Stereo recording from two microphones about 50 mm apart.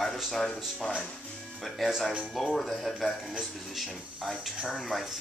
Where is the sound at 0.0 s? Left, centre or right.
Centre.